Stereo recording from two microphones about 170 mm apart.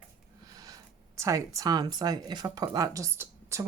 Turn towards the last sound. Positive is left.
turn(degrees=-15)  # may be behind; listen again after turning